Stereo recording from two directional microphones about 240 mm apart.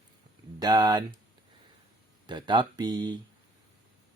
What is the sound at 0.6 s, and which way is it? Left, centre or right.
Speech, centre.